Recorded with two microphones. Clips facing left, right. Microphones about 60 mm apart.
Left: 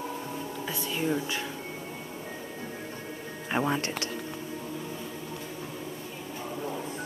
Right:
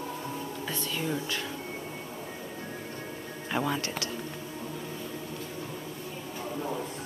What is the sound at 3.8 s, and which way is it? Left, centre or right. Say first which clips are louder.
Speech: left 1 dB; left.